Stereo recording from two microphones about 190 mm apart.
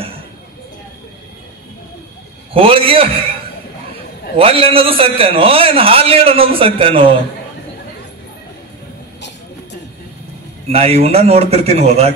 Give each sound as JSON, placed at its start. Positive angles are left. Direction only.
{"t": 2.5, "sound": "a man's voice", "side_deg": -30}
{"t": 4.4, "sound": "a man's voice", "side_deg": -30}
{"t": 10.7, "sound": "speech", "side_deg": -30}